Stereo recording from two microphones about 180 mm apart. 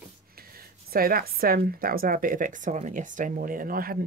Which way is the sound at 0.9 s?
55° right (ahead or behind).